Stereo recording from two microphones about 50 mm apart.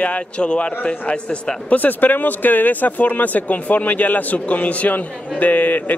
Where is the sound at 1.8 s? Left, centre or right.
Left.